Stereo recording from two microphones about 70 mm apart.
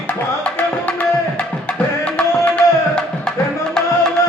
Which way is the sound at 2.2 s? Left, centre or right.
Centre.